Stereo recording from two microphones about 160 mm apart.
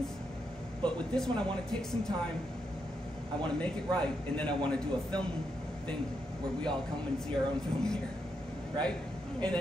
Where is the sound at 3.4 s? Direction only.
5° left (ahead or behind).